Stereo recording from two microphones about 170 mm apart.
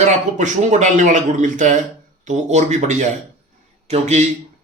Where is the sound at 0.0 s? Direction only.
45° right (ahead or behind).